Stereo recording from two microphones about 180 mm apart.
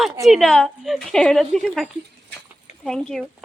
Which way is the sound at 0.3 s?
Centre (ahead or behind).